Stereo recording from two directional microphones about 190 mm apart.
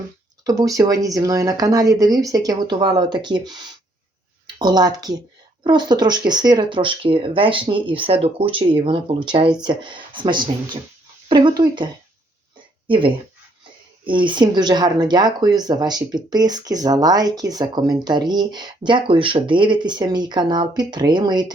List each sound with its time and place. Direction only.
0.4 s speech: 20° right (ahead or behind)
12.9 s speech: 25° right (ahead or behind)